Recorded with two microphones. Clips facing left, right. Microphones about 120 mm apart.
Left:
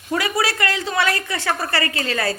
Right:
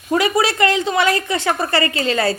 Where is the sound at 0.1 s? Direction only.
25° right (ahead or behind).